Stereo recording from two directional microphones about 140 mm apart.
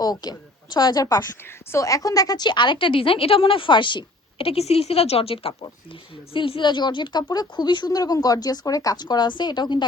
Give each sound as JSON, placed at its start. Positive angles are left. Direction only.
{"t": 0.0, "sound": "a woman's voice", "side_deg": 30}